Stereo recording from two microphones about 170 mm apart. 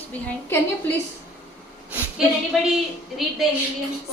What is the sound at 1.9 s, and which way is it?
Speech, 5° right (ahead or behind).